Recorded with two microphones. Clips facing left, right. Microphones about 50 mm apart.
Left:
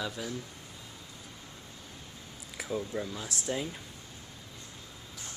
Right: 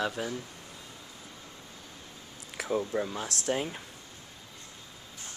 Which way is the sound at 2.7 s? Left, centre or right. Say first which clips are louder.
Right 4 dB; right.